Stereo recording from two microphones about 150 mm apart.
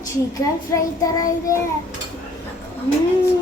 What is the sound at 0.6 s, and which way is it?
Child singing, 25° left (ahead or behind).